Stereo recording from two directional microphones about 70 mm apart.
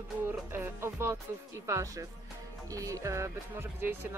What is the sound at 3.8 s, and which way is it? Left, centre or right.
Speech, right.